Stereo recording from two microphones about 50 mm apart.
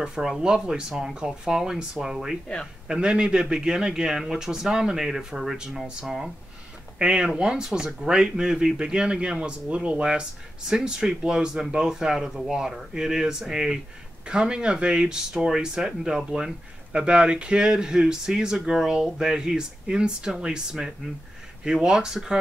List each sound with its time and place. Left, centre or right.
0.0 s speech: centre